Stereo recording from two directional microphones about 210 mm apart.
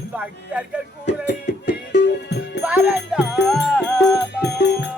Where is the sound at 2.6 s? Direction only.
5° right (ahead or behind).